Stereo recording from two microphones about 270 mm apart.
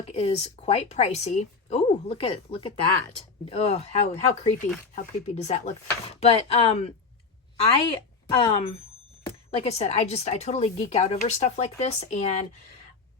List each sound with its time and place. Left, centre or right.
0.1 s a woman's voice: left